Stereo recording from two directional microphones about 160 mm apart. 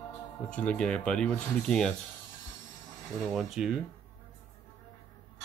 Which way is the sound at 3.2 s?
5° right (ahead or behind).